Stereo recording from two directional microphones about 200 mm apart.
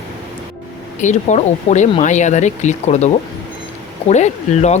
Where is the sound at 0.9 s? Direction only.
35° left (ahead or behind).